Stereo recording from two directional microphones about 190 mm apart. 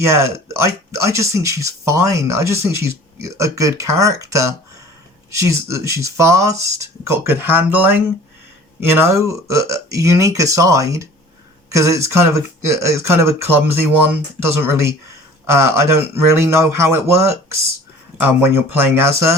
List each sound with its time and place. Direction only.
0.0 s speech: 15° right (ahead or behind)